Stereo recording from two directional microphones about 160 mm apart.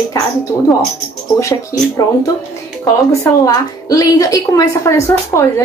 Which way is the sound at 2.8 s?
20° left (ahead or behind).